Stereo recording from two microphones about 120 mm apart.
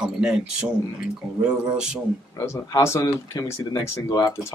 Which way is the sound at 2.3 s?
25° left (ahead or behind).